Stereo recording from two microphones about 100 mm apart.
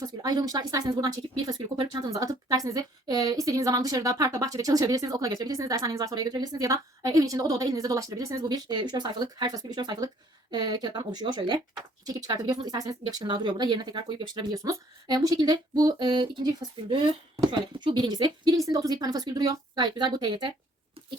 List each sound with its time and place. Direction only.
0.0 s a woman's voice: 40° right (ahead or behind)
13.2 s speech: 50° right (ahead or behind)
14.5 s a woman's voice: 35° right (ahead or behind)
16.0 s speech: 55° right (ahead or behind)
17.7 s speech: 50° right (ahead or behind)